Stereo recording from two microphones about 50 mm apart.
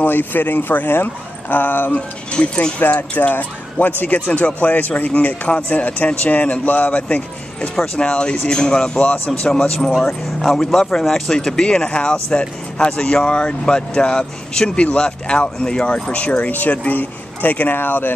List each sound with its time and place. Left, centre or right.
0.0 s speech: left
2.0 s speech: left
3.0 s speech: left
3.8 s speech: left